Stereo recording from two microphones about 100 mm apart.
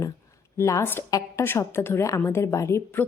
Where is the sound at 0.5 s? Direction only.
30° left (ahead or behind).